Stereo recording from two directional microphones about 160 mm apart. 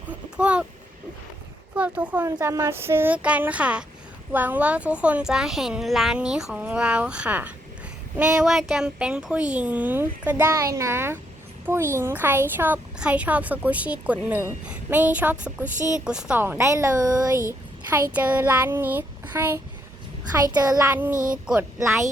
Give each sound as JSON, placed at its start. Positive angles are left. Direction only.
{"t": 0.3, "sound": "a child's voice", "side_deg": -5}
{"t": 1.7, "sound": "a child's voice", "side_deg": -10}
{"t": 21.1, "sound": "speech", "side_deg": -55}
{"t": 21.4, "sound": "speech", "side_deg": -5}
{"t": 21.8, "sound": "a child's voice", "side_deg": -20}